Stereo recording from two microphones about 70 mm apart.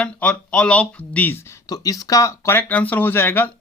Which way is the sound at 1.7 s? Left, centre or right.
Left.